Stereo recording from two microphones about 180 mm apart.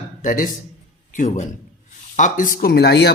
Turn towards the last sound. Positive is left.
turn(degrees=65)  # may be behind; listen again after turning